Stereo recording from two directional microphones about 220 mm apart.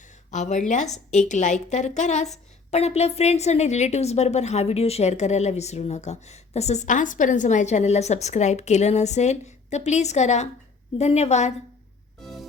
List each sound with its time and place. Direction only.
0.3 s a woman's voice: 30° left (ahead or behind)
12.2 s music: centre (ahead or behind)